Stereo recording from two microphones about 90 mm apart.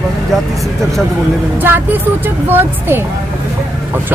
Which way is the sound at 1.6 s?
20° right (ahead or behind).